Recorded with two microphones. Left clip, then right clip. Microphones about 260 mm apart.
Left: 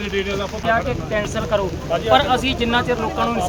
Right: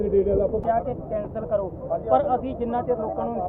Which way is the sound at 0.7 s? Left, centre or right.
Centre.